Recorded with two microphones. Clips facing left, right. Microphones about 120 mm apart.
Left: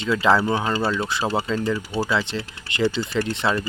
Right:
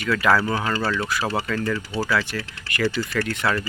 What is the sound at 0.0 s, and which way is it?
Speech, 25° left (ahead or behind).